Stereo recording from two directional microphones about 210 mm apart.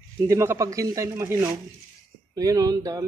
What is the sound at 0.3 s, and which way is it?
A man's voice, 15° right (ahead or behind).